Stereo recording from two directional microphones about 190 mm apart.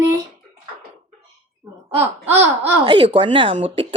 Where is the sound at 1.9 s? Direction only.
10° right (ahead or behind).